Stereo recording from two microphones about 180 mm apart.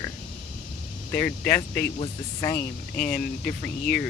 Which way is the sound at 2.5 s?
55° left (ahead or behind).